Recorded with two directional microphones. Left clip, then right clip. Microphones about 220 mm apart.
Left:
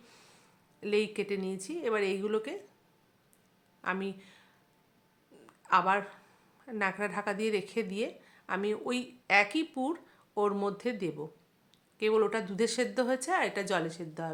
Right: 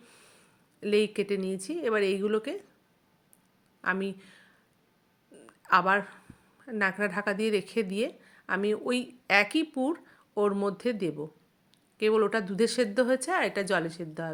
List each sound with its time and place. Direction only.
0.0 s a woman's voice: 10° right (ahead or behind)
3.8 s a woman's voice: 20° right (ahead or behind)
5.5 s a sound: 20° right (ahead or behind)
6.7 s a woman's voice: 20° right (ahead or behind)